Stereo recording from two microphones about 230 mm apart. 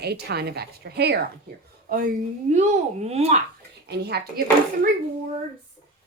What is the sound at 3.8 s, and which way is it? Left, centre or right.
Speech, right.